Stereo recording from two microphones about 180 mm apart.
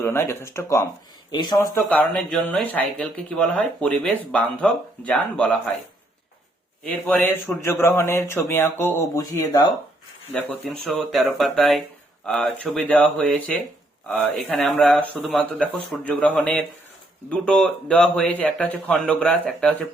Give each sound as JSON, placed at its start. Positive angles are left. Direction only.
{"t": 0.0, "sound": "speech", "side_deg": 15}
{"t": 1.9, "sound": "speech", "side_deg": 5}
{"t": 6.8, "sound": "speech", "side_deg": 10}
{"t": 10.3, "sound": "speech", "side_deg": 5}